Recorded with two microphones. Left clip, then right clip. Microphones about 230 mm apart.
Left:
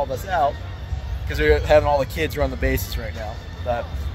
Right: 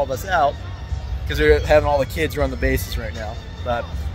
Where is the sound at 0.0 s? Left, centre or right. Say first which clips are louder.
Right 2 dB; right.